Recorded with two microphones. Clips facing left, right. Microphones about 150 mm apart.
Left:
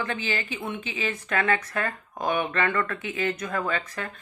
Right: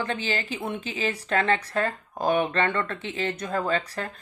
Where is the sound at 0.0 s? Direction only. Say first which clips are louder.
Right 1 dB; 35° right (ahead or behind).